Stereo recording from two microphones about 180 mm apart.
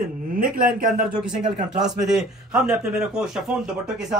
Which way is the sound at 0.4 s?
50° right (ahead or behind).